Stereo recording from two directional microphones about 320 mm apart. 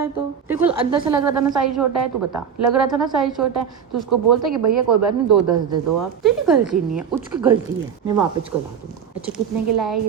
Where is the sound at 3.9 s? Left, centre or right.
Centre.